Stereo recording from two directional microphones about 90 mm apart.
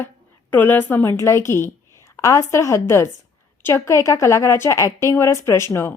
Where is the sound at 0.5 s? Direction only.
20° left (ahead or behind).